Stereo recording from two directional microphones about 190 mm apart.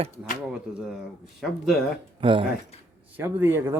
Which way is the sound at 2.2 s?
25° right (ahead or behind).